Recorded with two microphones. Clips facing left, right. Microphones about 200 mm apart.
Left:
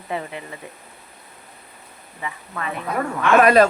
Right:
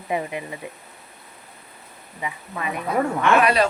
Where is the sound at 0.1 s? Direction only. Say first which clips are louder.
Right 3 dB; 15° right (ahead or behind).